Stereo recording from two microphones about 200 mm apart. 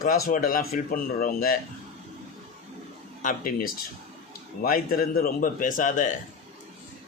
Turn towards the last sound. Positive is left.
turn(degrees=40)  # may be behind; listen again after turning